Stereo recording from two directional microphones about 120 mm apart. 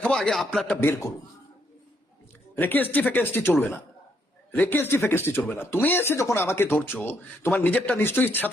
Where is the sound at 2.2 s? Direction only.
15° left (ahead or behind).